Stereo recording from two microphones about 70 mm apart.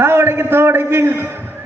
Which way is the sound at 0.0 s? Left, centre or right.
Right.